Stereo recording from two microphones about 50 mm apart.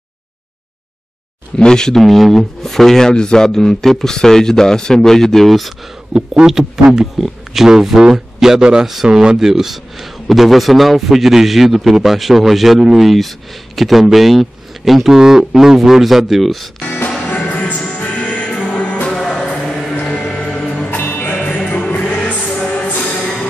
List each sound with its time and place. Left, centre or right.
1.6 s speech: centre
2.0 s speech: centre
6.1 s a man's voice: centre
16.8 s music: left
19.5 s music: centre
20.0 s music: left
20.9 s music: left
21.4 s music: left